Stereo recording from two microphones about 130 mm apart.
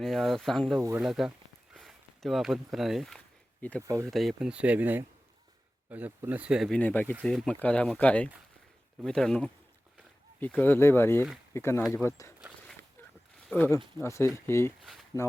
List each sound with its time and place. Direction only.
0.0 s speech: centre (ahead or behind)
0.8 s speech: 20° right (ahead or behind)
1.0 s speech: centre (ahead or behind)
1.7 s a sound: centre (ahead or behind)
2.7 s speech: centre (ahead or behind)
3.6 s speech: 10° left (ahead or behind)
3.8 s speech: 25° right (ahead or behind)
4.1 s speech: centre (ahead or behind)
6.7 s speech: 10° left (ahead or behind)
13.5 s speech: 10° left (ahead or behind)